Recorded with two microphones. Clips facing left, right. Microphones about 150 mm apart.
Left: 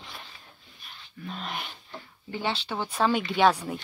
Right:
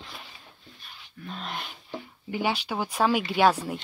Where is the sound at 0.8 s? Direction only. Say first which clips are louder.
Left 1 dB; centre (ahead or behind).